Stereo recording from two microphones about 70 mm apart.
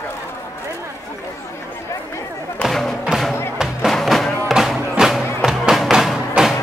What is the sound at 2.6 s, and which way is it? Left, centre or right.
Music, centre.